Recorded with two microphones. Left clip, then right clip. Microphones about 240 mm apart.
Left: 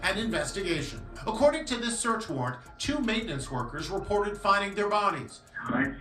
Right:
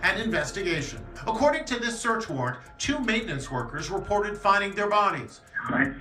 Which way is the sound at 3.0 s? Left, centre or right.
Left.